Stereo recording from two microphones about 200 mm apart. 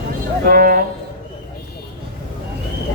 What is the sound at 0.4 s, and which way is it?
Speech, 45° right (ahead or behind).